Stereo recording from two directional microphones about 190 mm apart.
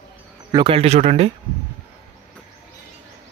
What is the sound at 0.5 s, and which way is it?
Speech, 30° right (ahead or behind).